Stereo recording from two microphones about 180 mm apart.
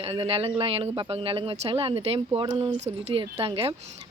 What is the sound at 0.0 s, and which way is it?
Speech, 35° right (ahead or behind).